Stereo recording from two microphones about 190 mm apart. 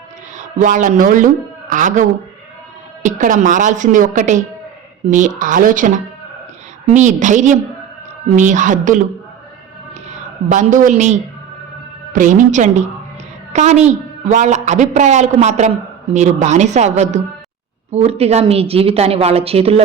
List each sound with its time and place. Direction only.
0.3 s a man's voice: 40° right (ahead or behind)
10.5 s a man's voice: 40° right (ahead or behind)